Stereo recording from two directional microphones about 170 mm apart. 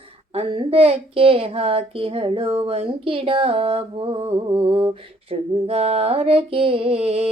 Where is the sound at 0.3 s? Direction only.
30° right (ahead or behind).